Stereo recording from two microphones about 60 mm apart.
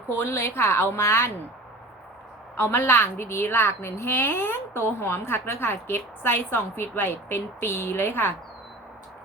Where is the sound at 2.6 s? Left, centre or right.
Left.